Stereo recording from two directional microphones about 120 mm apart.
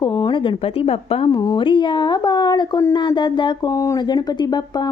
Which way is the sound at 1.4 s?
40° left (ahead or behind).